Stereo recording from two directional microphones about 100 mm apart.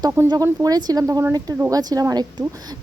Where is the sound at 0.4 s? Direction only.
40° right (ahead or behind).